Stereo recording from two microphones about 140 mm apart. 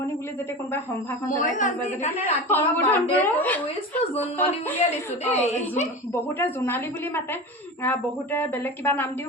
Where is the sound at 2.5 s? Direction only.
15° left (ahead or behind).